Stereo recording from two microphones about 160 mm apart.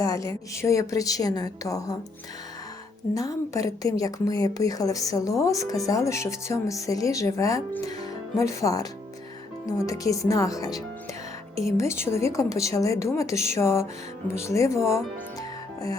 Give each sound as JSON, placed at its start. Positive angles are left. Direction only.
{"t": 0.0, "sound": "a woman's voice", "side_deg": 20}
{"t": 3.2, "sound": "a woman's voice", "side_deg": 20}